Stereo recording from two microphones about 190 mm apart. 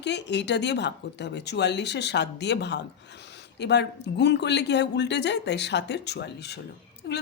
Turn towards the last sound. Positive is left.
turn(degrees=65)  # may be behind; listen again after turning